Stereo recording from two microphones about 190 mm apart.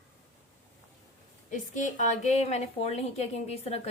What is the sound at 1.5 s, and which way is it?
A woman's voice, 40° left (ahead or behind).